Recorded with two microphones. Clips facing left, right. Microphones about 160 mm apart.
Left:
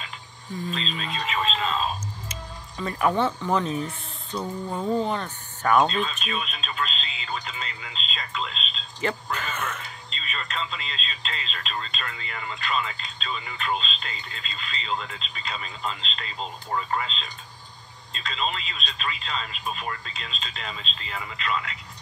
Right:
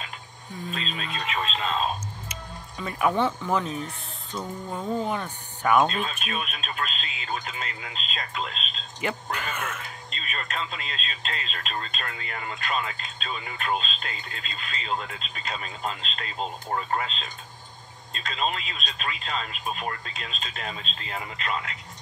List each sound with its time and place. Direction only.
0.7 s a sound: 50° right (ahead or behind)
2.8 s speech: 5° right (ahead or behind)
5.0 s speech: 10° right (ahead or behind)
6.0 s speech: 50° right (ahead or behind)
9.0 s speech: 10° right (ahead or behind)
9.8 s speech: 50° right (ahead or behind)